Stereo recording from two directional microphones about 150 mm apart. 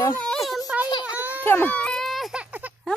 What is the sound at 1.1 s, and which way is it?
Baby cry, 10° right (ahead or behind).